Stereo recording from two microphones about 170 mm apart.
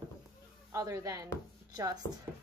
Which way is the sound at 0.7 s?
20° right (ahead or behind).